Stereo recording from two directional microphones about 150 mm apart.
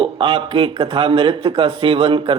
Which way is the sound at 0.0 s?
35° right (ahead or behind).